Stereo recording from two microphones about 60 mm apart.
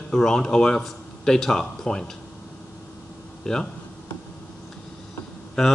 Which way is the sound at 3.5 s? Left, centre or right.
Centre.